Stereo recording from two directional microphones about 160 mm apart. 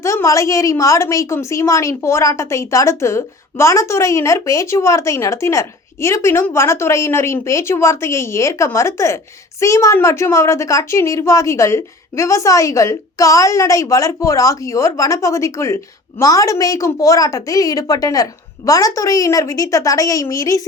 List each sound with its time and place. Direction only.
0.0 s a woman's voice: 20° left (ahead or behind)